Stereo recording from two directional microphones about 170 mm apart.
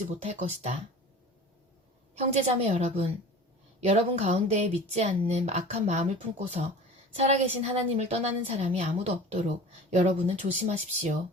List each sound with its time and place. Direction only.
0.1 s speech: 40° right (ahead or behind)
2.1 s speech: 40° right (ahead or behind)